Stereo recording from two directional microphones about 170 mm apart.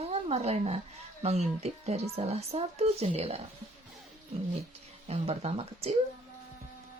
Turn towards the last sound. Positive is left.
turn(degrees=-35)  # may be behind; listen again after turning